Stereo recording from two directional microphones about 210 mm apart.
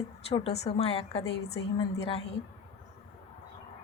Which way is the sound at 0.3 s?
30° left (ahead or behind).